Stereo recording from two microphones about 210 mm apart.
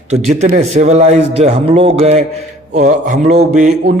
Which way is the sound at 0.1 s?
35° right (ahead or behind).